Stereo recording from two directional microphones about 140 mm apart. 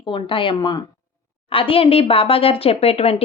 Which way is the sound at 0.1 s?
40° left (ahead or behind).